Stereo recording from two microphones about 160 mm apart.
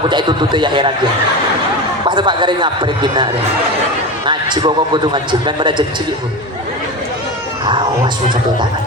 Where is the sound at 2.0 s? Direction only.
30° right (ahead or behind).